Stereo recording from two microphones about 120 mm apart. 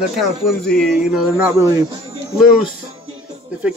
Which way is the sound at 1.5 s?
25° right (ahead or behind).